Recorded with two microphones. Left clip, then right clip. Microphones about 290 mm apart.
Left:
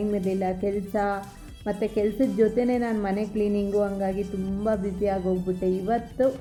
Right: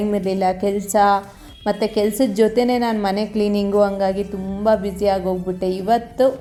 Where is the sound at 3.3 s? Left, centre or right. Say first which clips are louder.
Right 6 dB; right.